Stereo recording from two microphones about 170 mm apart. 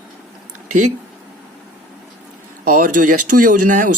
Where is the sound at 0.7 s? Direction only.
45° right (ahead or behind).